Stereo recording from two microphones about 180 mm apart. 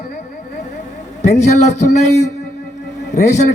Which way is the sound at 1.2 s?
40° left (ahead or behind).